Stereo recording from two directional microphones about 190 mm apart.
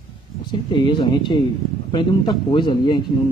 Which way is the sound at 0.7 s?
25° left (ahead or behind).